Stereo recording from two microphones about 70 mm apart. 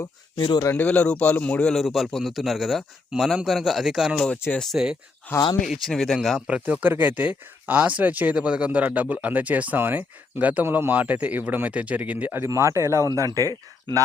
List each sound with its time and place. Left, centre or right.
0.8 s a man's voice: centre
1.7 s speech: centre
5.3 s speech: left
5.6 s speech: centre
6.5 s speech: centre
12.5 s speech: right